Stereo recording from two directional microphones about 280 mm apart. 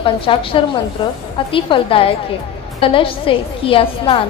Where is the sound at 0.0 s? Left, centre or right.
Centre.